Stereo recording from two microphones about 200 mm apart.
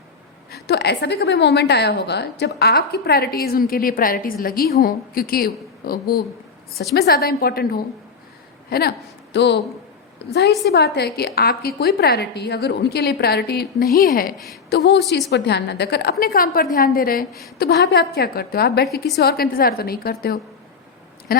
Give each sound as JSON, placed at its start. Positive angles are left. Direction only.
{"t": 0.5, "sound": "a woman's voice", "side_deg": 55}
{"t": 10.7, "sound": "a woman's voice", "side_deg": 55}
{"t": 14.3, "sound": "a woman's voice", "side_deg": 0}
{"t": 14.7, "sound": "a woman's voice", "side_deg": 55}